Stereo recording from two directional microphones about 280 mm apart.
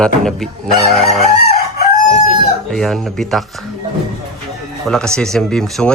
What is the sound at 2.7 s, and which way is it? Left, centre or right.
Speech, centre.